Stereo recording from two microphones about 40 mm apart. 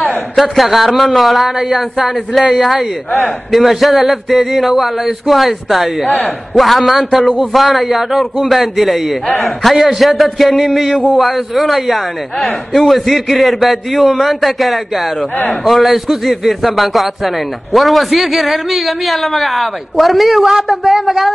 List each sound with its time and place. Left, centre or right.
0.4 s a man's voice: centre
3.1 s a man's voice: left
3.5 s a man's voice: centre
6.0 s a man's voice: left
6.5 s a man's voice: centre